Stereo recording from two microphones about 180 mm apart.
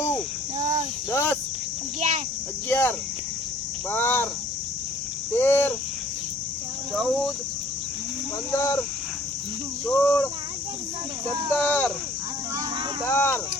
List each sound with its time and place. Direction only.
1.1 s cricket: 15° left (ahead or behind)
2.0 s cricket: 40° right (ahead or behind)
2.6 s cricket: 10° left (ahead or behind)
3.9 s cricket: 10° left (ahead or behind)
5.3 s cricket: 15° left (ahead or behind)
6.9 s speech: centre (ahead or behind)
8.5 s speech: 15° left (ahead or behind)
9.8 s speech: 5° left (ahead or behind)
11.5 s speech: 10° left (ahead or behind)
13.1 s speech: 10° left (ahead or behind)